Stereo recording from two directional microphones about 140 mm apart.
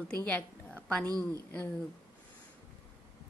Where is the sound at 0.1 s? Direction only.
10° left (ahead or behind).